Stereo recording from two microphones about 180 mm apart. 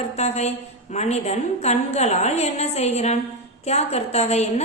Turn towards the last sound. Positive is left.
turn(degrees=35)  # may be behind; listen again after turning